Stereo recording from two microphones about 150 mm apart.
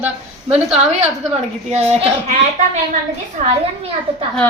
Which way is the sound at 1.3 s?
45° right (ahead or behind).